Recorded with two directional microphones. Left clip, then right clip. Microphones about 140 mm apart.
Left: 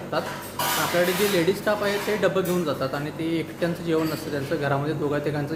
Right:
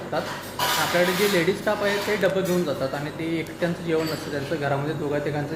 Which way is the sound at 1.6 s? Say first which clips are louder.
Even; 20° left (ahead or behind).